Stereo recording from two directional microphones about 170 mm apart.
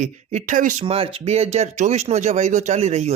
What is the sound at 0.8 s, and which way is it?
Speech, 35° right (ahead or behind).